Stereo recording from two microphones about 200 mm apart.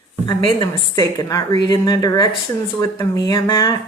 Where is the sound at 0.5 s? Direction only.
20° left (ahead or behind).